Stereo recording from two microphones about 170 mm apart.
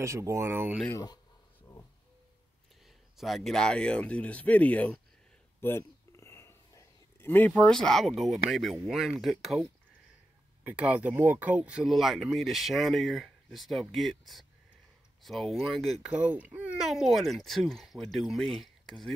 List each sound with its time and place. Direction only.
0.0 s speech: 15° right (ahead or behind)
0.8 s speech: 20° left (ahead or behind)
3.2 s speech: centre (ahead or behind)
5.6 s a sound: 15° left (ahead or behind)
8.8 s speech: centre (ahead or behind)